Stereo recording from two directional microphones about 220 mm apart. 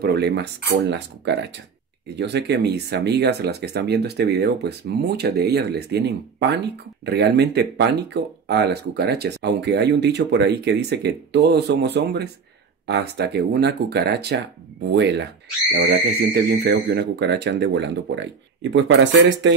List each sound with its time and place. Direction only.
0.0 s speech: 50° right (ahead or behind)